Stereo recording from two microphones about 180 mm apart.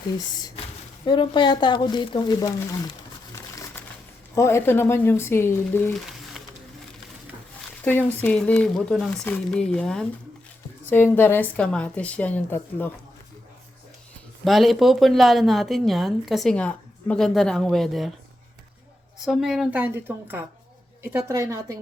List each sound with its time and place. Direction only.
0.2 s speech: 20° left (ahead or behind)
4.4 s a woman's voice: 15° left (ahead or behind)
7.9 s a woman's voice: 10° left (ahead or behind)
14.4 s speech: centre (ahead or behind)
19.2 s a woman's voice: centre (ahead or behind); by 21.8 s 15° right (ahead or behind)